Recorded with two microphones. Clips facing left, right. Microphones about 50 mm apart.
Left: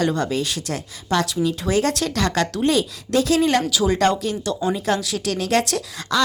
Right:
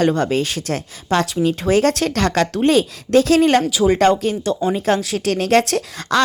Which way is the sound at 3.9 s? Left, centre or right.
Right.